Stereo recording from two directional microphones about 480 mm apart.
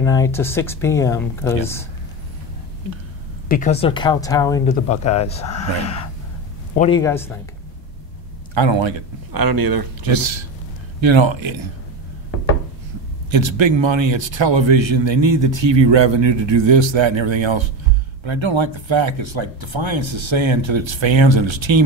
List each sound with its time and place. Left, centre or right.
0.0 s speech: centre
3.4 s speech: centre
8.5 s speech: right
9.3 s speech: right
11.0 s speech: right
13.3 s speech: right